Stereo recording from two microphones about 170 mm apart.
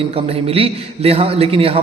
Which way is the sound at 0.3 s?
35° right (ahead or behind).